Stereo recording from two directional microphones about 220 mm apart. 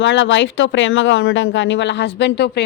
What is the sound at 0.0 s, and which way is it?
Speech, 55° left (ahead or behind).